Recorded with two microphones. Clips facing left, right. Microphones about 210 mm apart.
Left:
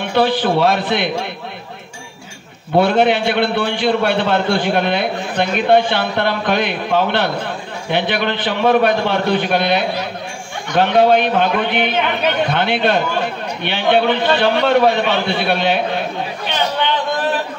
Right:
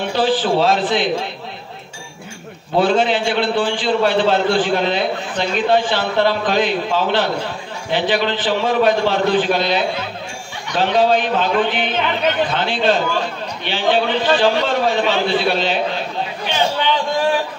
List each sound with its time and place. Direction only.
0.1 s a man's voice: 60° left (ahead or behind)
2.8 s a man's voice: 60° left (ahead or behind)